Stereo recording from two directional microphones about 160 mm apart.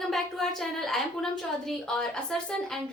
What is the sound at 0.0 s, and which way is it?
A woman's voice, centre (ahead or behind).